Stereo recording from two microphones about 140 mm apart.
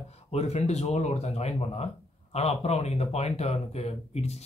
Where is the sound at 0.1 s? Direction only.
50° left (ahead or behind).